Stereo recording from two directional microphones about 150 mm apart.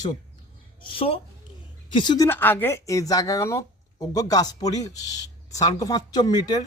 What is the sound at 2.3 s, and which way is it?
A man's voice, 15° left (ahead or behind).